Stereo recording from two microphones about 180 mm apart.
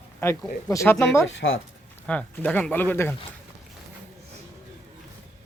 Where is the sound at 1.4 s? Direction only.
60° left (ahead or behind).